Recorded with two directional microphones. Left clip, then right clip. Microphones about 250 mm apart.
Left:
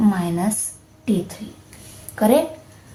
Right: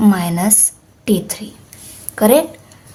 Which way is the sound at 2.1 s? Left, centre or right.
Right.